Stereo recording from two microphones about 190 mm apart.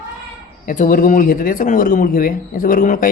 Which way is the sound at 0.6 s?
40° left (ahead or behind).